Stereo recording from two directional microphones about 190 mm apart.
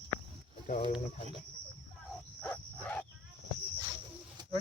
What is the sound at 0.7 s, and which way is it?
Speech, 40° left (ahead or behind).